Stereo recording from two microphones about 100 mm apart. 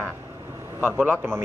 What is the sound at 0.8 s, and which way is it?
Speech, 20° right (ahead or behind).